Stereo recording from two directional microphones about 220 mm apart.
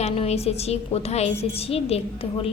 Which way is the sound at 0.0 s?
30° left (ahead or behind).